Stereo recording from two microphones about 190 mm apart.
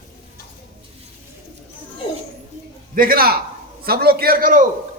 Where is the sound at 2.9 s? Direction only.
50° right (ahead or behind).